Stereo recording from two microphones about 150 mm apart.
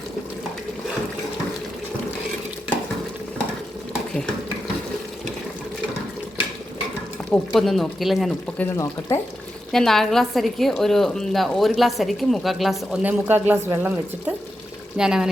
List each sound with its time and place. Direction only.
7.3 s a woman's voice: centre (ahead or behind)
8.5 s speech: 15° left (ahead or behind)
9.7 s a woman's voice: centre (ahead or behind)
14.9 s a woman's voice: 5° right (ahead or behind)